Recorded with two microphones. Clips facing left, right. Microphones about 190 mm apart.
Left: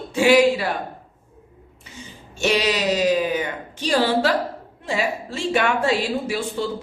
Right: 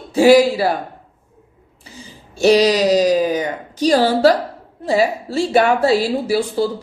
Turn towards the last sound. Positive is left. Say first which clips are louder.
# right 7 dB
turn(degrees=-35)  # may be behind; listen again after turning